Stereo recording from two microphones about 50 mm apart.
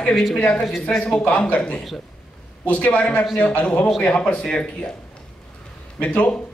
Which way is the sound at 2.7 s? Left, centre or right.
Left.